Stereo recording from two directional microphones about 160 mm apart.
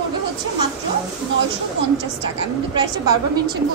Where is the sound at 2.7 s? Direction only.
30° right (ahead or behind).